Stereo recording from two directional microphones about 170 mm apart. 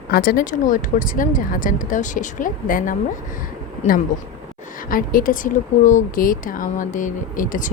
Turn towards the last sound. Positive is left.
turn(degrees=50)  # may be behind; listen again after turning